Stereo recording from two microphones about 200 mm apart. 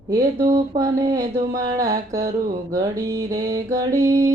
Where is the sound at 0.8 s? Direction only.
15° right (ahead or behind).